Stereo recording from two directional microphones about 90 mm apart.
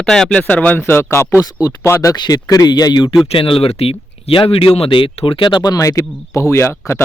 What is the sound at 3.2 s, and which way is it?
Speech, 80° left.